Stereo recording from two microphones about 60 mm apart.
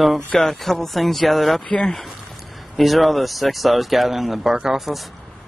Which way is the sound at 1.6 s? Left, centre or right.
Centre.